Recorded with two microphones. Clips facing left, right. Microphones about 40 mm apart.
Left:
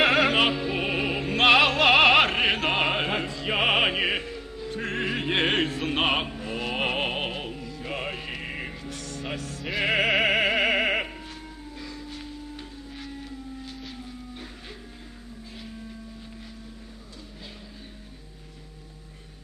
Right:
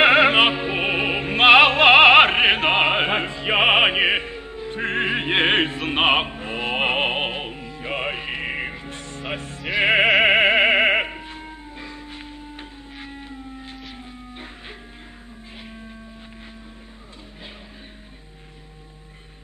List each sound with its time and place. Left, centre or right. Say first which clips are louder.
0.0 s music: right 6 dB; right